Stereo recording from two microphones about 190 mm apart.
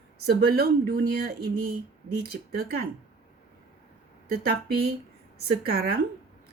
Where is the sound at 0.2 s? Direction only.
55° right (ahead or behind).